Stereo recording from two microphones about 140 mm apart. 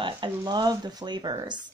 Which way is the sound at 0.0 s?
30° right (ahead or behind).